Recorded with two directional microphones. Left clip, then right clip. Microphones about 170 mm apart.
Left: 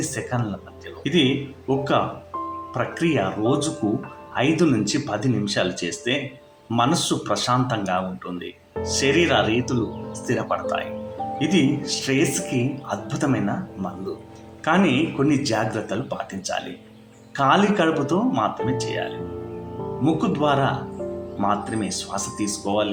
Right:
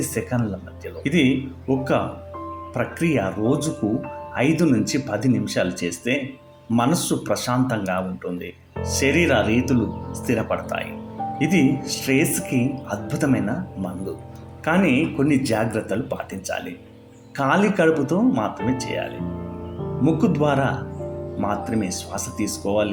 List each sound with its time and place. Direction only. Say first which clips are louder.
0.0 s speech: right 1 dB; 40° right (ahead or behind)
14.6 s speech: even; 40° right (ahead or behind)
20.1 s speech: right 1 dB; 35° right (ahead or behind)